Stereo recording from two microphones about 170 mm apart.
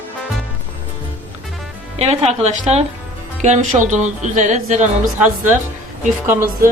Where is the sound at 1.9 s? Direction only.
40° right (ahead or behind).